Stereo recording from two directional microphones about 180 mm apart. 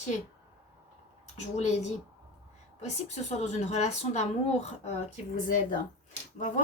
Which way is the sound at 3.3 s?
40° left (ahead or behind).